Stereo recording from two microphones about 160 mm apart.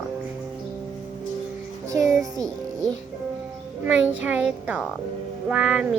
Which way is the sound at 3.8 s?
10° right (ahead or behind).